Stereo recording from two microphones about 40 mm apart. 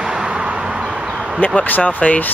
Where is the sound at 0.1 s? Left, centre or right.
Right.